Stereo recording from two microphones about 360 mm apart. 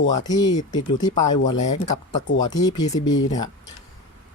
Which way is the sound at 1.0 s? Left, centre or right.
Centre.